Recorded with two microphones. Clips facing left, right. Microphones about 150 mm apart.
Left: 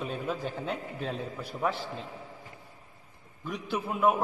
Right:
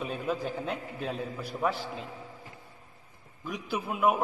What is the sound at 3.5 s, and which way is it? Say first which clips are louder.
Speech: left 1 dB; 5° right (ahead or behind).